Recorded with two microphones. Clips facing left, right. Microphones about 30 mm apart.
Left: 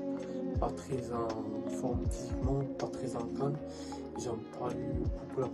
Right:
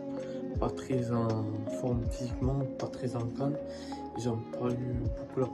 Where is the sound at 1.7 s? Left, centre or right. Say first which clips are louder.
Right 2 dB; right.